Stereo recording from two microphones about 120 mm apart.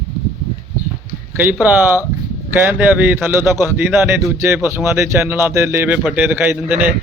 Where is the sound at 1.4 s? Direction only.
15° right (ahead or behind).